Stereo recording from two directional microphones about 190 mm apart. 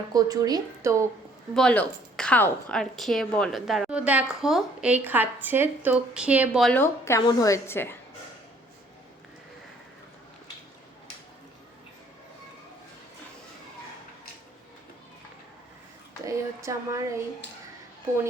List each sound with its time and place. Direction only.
0.1 s a woman's voice: 20° right (ahead or behind)
1.5 s a woman's voice: 5° left (ahead or behind)
6.7 s a woman's voice: 15° left (ahead or behind)
16.2 s speech: 15° right (ahead or behind)